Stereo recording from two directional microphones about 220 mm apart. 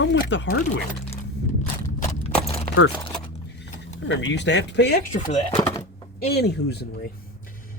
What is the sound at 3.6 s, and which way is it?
Speech, 55° left (ahead or behind).